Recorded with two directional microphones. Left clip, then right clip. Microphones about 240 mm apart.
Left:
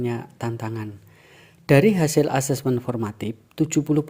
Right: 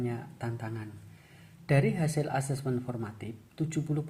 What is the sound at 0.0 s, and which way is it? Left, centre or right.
Speech, left.